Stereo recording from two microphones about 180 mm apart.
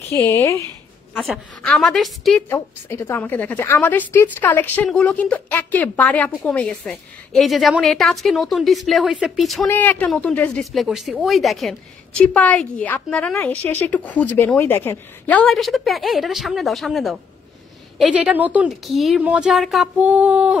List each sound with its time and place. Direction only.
0.1 s a woman's voice: 15° left (ahead or behind)
1.6 s speech: 5° left (ahead or behind)
2.5 s a woman's voice: 10° left (ahead or behind); by 20.5 s 5° right (ahead or behind)